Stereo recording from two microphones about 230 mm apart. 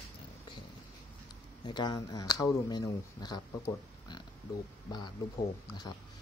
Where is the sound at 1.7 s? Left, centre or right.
Centre.